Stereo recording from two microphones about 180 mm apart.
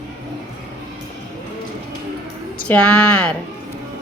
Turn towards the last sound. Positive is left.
turn(degrees=5)  # may be behind; listen again after turning